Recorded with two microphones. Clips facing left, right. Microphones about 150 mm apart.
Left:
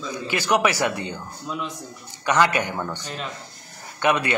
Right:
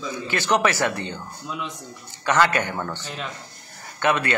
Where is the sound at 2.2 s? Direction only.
15° left (ahead or behind).